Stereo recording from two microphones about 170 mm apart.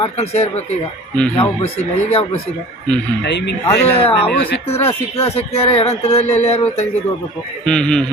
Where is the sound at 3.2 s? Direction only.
90° left.